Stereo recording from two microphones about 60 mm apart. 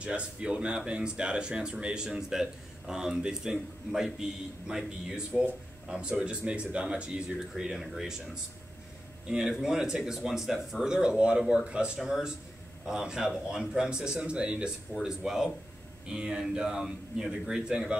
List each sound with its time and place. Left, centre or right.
0.0 s speech: centre
9.3 s speech: centre
15.0 s speech: centre